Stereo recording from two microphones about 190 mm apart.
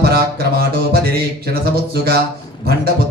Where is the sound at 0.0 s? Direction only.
55° right (ahead or behind).